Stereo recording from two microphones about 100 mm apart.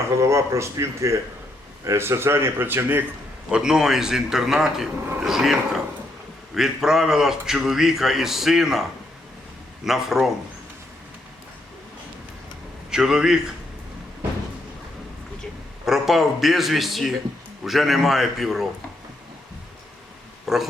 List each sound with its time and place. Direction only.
0.1 s speech: 30° right (ahead or behind)
3.5 s a man's voice: 5° right (ahead or behind)
12.9 s a man's voice: 5° right (ahead or behind)
15.9 s a man's voice: centre (ahead or behind)
20.4 s speech: 5° right (ahead or behind)